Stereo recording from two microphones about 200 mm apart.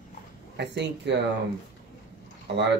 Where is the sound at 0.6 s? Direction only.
60° right (ahead or behind).